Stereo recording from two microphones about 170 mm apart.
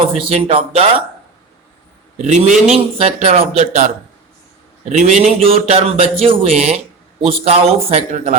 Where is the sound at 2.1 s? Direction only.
45° right (ahead or behind).